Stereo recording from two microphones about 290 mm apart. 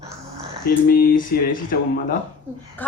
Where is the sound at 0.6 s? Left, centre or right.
Left.